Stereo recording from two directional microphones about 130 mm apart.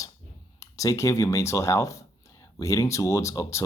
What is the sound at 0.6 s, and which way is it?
Speech, 25° left (ahead or behind).